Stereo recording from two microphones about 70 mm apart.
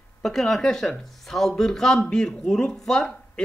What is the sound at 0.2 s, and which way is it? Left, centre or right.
Speech, centre.